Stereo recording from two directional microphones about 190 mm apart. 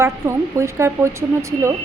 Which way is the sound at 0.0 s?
15° right (ahead or behind).